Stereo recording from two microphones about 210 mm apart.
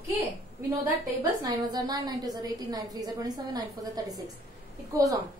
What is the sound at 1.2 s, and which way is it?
A woman's voice, 20° right (ahead or behind).